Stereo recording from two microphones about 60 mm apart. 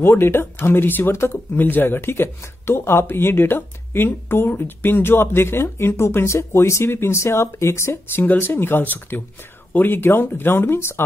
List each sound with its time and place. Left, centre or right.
0.0 s speech: left
8.3 s speech: left